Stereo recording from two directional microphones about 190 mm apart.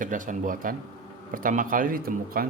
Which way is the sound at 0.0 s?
45° right (ahead or behind).